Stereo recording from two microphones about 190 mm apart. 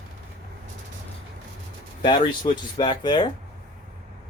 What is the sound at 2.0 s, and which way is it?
Speech, 25° left (ahead or behind).